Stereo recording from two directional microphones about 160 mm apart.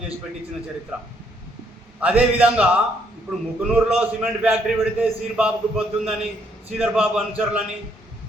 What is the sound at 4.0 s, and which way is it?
A man's voice, 10° right (ahead or behind).